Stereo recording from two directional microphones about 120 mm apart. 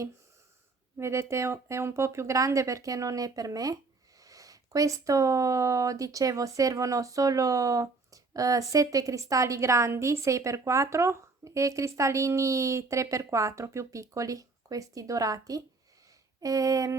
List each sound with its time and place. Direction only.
0.9 s speech: 25° right (ahead or behind)